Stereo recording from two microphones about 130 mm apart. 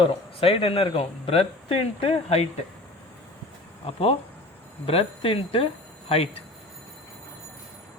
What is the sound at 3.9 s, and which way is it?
A man's voice, 50° left (ahead or behind).